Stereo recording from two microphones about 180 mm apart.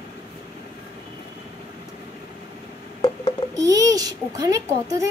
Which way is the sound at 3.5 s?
20° right (ahead or behind).